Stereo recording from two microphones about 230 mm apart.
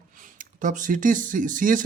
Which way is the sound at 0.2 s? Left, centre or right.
Right.